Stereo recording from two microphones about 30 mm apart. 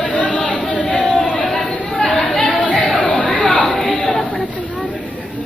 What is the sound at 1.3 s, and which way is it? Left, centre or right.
Chatter, left.